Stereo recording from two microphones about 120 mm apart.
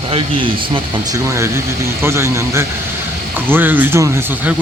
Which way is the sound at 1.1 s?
25° right (ahead or behind).